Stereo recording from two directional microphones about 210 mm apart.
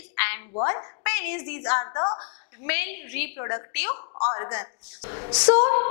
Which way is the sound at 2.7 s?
10° left (ahead or behind).